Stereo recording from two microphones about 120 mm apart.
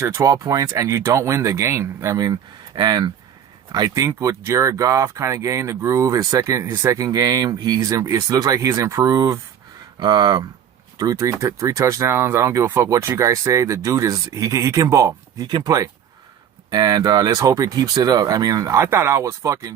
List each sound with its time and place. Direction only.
0.0 s speech: 25° right (ahead or behind)